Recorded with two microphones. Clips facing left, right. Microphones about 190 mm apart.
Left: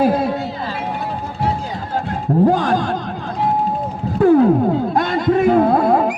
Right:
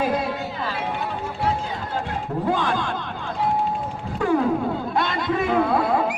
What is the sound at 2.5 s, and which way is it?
Speech, 40° left (ahead or behind).